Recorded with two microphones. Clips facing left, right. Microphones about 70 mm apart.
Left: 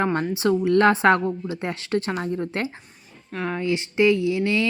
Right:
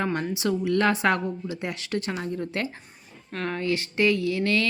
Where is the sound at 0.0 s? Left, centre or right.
Left.